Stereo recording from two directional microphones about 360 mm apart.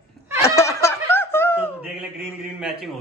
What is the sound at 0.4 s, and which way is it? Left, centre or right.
Snicker, centre.